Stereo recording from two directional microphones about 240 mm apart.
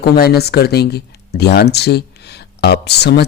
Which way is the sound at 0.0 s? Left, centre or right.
Left.